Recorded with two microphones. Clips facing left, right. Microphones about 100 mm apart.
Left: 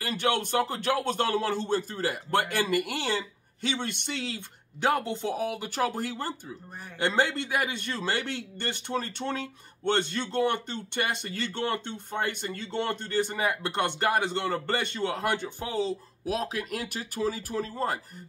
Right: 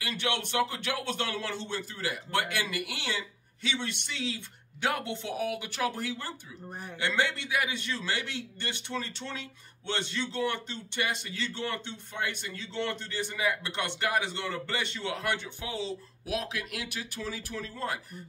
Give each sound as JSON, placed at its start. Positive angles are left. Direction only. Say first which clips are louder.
{"t": 0.0, "sound": "a man's voice", "louder": "left 5 dB", "side_deg": 40}